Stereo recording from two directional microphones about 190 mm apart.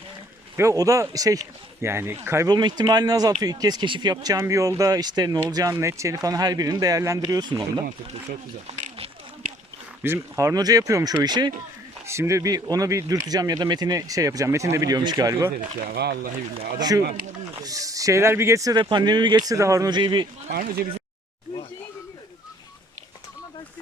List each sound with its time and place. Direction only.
0.5 s speech: 15° right (ahead or behind)
7.9 s speech: 40° right (ahead or behind)
10.0 s speech: 15° right (ahead or behind)
15.9 s speech: 55° right (ahead or behind)
16.7 s speech: 20° right (ahead or behind)
17.0 s speech: 55° right (ahead or behind)
17.6 s speech: 20° right (ahead or behind)
20.5 s speech: 50° right (ahead or behind)